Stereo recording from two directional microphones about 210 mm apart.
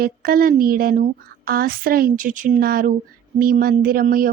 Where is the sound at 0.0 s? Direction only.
45° right (ahead or behind).